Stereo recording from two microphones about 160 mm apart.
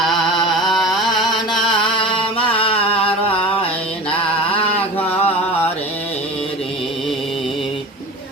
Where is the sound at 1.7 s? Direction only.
30° left (ahead or behind).